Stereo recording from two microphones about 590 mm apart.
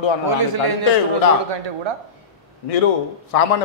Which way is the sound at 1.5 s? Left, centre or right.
Right.